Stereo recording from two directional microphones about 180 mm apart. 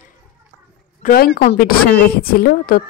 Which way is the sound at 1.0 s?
50° left (ahead or behind).